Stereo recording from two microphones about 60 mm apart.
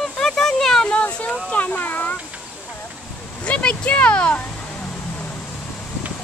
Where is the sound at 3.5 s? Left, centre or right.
Left.